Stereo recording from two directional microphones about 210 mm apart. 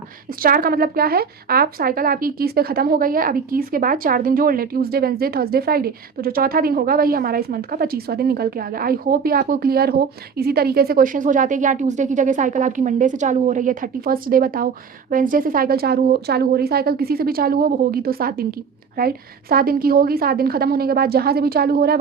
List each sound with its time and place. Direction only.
0.3 s speech: 45° right (ahead or behind)